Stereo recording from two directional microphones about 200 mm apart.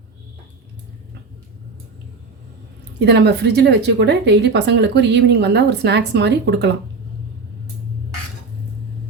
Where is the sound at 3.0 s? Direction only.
55° right (ahead or behind).